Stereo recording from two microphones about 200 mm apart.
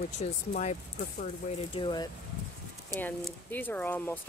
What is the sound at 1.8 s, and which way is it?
Speech, 20° left (ahead or behind).